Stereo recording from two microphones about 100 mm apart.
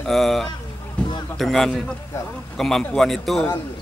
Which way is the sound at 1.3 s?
Centre (ahead or behind).